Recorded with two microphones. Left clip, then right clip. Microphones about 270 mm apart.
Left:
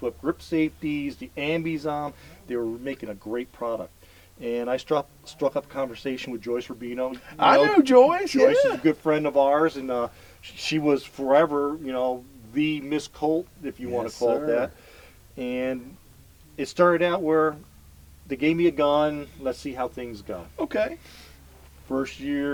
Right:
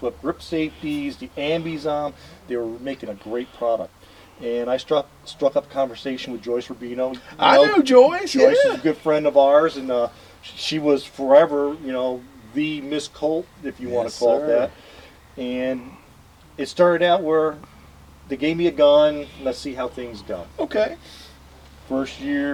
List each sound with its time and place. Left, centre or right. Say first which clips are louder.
0.0 s speech: right 2 dB; left